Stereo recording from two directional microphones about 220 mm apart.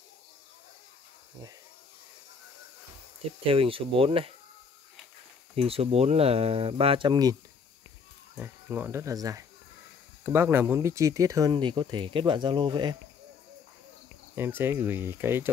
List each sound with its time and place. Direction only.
3.4 s speech: 25° right (ahead or behind)
5.6 s speech: 25° right (ahead or behind)
8.4 s speech: 10° right (ahead or behind)
14.3 s speech: 10° right (ahead or behind)